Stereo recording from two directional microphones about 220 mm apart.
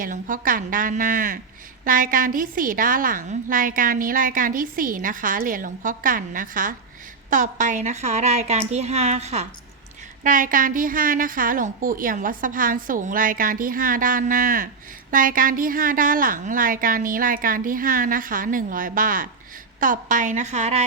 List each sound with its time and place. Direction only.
0.0 s a woman's voice: 40° right (ahead or behind)